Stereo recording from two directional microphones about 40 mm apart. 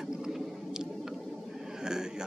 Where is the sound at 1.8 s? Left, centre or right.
Centre.